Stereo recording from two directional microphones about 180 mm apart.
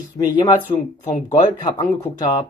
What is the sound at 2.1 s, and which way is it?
Speech, 20° left (ahead or behind).